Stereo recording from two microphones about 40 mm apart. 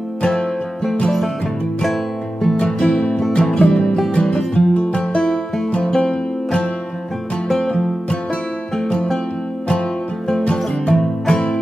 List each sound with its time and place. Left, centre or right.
0.3 s music: centre
2.8 s music: left
4.1 s music: left
5.1 s music: centre
8.8 s music: centre